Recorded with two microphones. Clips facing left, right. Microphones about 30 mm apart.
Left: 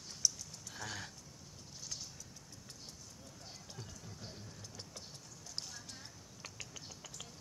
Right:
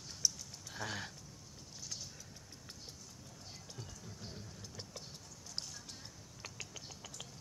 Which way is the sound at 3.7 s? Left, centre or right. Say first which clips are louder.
Even; centre.